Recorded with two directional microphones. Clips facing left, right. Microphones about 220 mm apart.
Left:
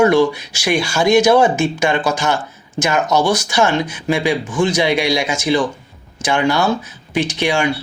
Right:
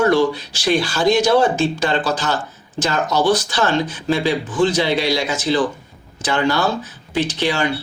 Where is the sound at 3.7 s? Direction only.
15° left (ahead or behind).